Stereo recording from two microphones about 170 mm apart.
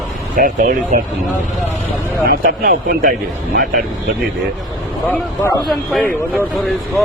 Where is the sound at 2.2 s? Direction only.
60° right (ahead or behind).